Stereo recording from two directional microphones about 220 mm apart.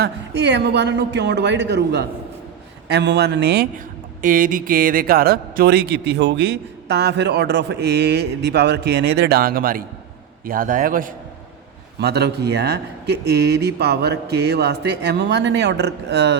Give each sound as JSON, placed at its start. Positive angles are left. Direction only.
{"t": 0.0, "sound": "a man's voice", "side_deg": -50}
{"t": 4.2, "sound": "a man's voice", "side_deg": -40}